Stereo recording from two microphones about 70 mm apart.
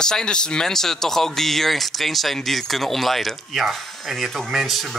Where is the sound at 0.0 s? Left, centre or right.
Centre.